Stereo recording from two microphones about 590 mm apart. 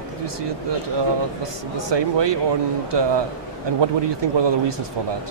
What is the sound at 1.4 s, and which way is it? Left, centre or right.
Speech, right.